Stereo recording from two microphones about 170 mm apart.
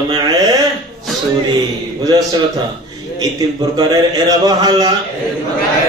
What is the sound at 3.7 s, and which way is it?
A man's voice, 20° right (ahead or behind).